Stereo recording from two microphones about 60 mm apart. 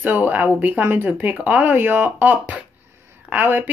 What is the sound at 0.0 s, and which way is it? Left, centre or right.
Speech, right.